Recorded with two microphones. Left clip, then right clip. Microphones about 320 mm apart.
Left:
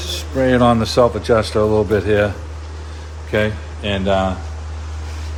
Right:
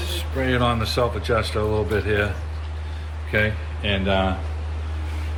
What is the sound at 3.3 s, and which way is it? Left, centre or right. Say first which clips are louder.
Speech: left 4 dB; left.